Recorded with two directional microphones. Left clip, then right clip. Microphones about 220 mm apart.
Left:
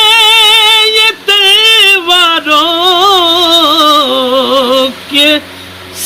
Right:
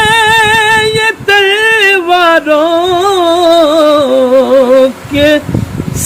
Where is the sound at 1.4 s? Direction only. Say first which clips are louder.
Left 5 dB; 35° right (ahead or behind).